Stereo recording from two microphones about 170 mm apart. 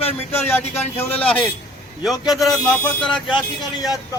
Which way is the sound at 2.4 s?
25° left (ahead or behind).